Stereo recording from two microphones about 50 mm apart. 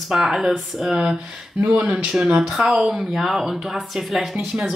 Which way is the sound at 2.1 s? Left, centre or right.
Centre.